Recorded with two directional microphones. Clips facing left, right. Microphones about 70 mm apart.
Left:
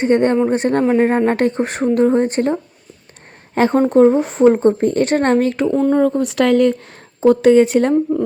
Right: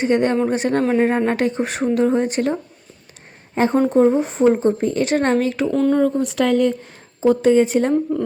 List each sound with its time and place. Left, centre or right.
0.0 s speech: left
0.8 s speech: centre
1.4 s speech: left
3.5 s a woman's voice: left
3.8 s speech: left
4.6 s speech: left
5.7 s speech: centre
6.0 s speech: left
6.2 s speech: left